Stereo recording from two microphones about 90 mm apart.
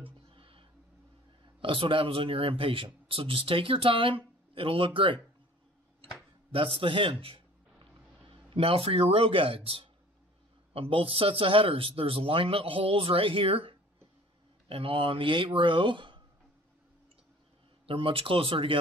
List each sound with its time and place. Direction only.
0.0 s a sound: 80° right
1.4 s speech: 80° right
6.5 s a man's voice: 80° right
17.8 s speech: 90° right